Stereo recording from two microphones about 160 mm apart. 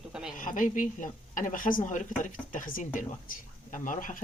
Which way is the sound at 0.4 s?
55° left (ahead or behind).